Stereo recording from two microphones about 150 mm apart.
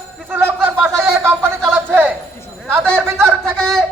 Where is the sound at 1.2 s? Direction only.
15° right (ahead or behind).